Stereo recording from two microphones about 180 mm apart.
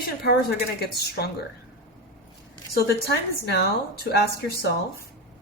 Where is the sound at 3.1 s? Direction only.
65° left (ahead or behind).